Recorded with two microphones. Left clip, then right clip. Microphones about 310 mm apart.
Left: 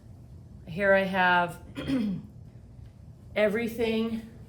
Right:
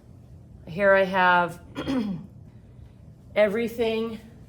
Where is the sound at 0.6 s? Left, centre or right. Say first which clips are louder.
Right 4 dB; centre.